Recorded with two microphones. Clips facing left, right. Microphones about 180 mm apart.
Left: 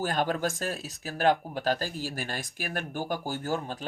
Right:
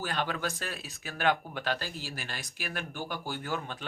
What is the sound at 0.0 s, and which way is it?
Speech, 45° left (ahead or behind).